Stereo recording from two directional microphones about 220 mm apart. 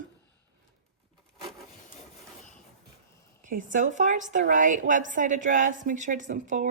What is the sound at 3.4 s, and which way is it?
A woman's voice, 35° right (ahead or behind).